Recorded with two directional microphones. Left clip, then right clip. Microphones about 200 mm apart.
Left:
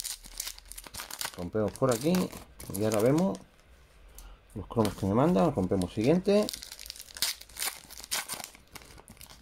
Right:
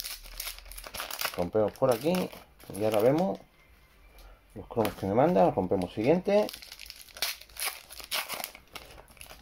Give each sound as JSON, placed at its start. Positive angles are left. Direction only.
{"t": 0.8, "sound": "speech", "side_deg": 20}
{"t": 4.9, "sound": "speech", "side_deg": 20}
{"t": 7.2, "sound": "crumpling", "side_deg": 15}